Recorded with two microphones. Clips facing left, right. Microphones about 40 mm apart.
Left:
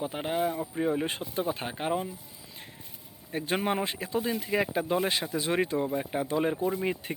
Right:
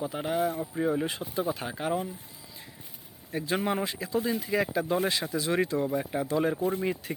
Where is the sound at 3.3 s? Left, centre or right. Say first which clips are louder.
Even; left.